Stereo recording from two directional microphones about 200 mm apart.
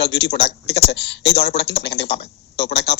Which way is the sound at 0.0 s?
55° left (ahead or behind).